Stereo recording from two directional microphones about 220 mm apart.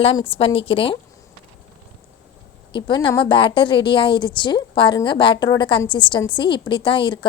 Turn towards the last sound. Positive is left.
turn(degrees=20)  # may be behind; listen again after turning